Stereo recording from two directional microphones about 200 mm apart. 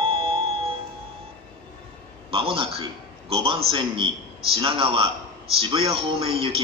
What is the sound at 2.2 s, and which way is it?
A man's voice, 25° right (ahead or behind).